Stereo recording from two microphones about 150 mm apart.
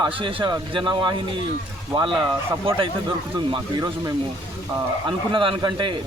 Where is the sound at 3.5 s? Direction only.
30° right (ahead or behind).